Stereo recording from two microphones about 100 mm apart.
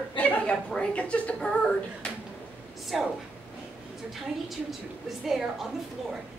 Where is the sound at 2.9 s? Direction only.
Centre (ahead or behind).